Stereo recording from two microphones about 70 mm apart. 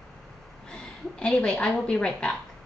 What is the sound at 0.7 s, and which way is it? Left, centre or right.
A woman's voice, centre.